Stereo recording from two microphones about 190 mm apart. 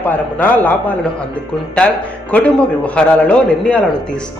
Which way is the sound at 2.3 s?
5° left (ahead or behind).